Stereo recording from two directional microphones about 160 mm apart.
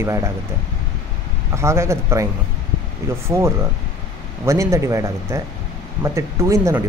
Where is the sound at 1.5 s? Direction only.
15° right (ahead or behind).